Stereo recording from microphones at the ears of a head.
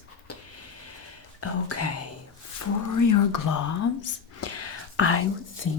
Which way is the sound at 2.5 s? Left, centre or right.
Left.